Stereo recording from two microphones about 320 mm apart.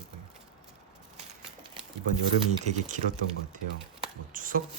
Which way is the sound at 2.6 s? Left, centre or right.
Right.